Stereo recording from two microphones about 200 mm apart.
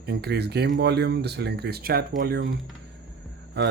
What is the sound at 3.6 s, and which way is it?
Speech, 60° right (ahead or behind).